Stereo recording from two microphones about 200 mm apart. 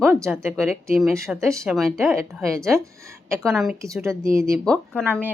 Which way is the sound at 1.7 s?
Centre (ahead or behind).